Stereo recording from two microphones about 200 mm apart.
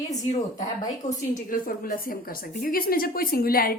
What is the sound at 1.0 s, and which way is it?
A woman's voice, 35° left (ahead or behind).